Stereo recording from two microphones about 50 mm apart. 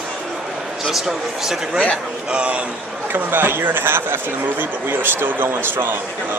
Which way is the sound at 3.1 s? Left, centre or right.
Right.